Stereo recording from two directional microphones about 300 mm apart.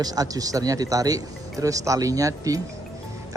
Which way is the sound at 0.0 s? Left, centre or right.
Centre.